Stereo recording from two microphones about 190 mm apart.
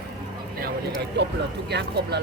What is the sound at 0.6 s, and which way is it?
Speech, 65° right (ahead or behind).